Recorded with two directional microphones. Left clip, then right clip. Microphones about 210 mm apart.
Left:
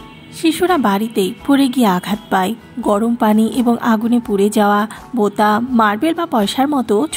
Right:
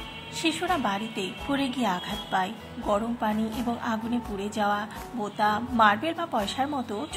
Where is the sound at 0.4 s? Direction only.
25° left (ahead or behind).